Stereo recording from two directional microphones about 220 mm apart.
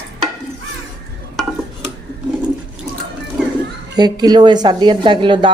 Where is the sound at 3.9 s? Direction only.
20° right (ahead or behind).